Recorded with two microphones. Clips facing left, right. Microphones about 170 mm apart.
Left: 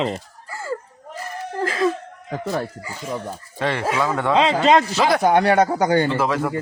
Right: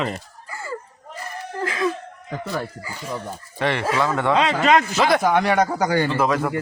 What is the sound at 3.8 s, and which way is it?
Speech, 10° left (ahead or behind).